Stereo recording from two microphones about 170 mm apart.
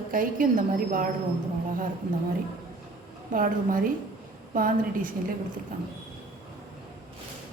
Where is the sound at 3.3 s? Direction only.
55° right (ahead or behind).